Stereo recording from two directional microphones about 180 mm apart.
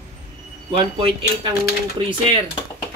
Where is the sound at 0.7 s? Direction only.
30° right (ahead or behind).